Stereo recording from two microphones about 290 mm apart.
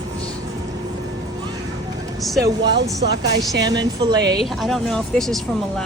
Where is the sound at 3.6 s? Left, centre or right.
Centre.